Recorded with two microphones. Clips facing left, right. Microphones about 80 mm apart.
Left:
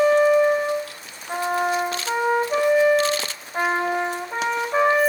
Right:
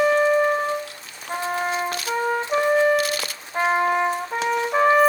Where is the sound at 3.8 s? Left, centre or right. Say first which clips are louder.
Right 3 dB; right.